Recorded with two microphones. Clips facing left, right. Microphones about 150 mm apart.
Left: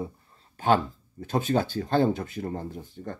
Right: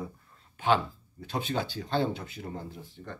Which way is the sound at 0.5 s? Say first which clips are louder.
Left 3 dB; 45° left (ahead or behind).